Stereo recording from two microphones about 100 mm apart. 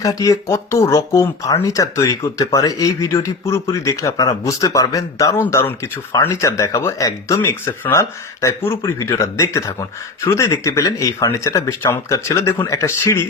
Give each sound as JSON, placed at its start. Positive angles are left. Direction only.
{"t": 0.0, "sound": "speech", "side_deg": 35}
{"t": 5.4, "sound": "speech", "side_deg": 25}